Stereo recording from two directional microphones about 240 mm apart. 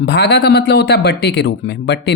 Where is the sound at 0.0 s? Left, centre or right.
Left.